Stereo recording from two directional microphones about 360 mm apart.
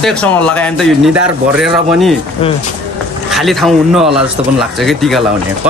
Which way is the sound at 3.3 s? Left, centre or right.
Centre.